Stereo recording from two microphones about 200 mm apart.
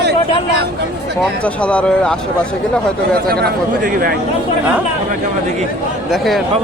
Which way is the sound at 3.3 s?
50° right (ahead or behind).